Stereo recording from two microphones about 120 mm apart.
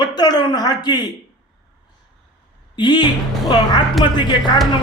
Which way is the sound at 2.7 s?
40° left (ahead or behind).